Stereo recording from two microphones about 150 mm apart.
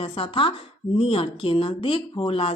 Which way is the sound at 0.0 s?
35° left (ahead or behind).